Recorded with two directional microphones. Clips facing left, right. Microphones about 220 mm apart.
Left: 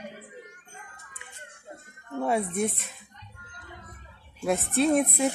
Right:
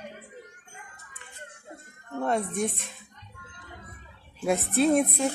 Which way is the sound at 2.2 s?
5° left (ahead or behind).